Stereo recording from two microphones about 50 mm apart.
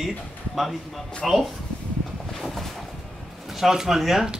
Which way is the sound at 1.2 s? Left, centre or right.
Centre.